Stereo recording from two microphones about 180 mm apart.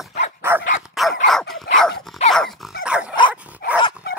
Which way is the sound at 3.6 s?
60° left (ahead or behind).